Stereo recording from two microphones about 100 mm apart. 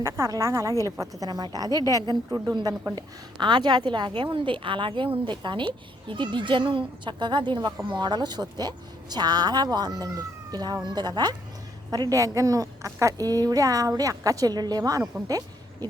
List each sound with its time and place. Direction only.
0.0 s a woman's voice: 30° right (ahead or behind)
2.9 s a woman's voice: 50° right (ahead or behind)
15.3 s a sound: 40° right (ahead or behind)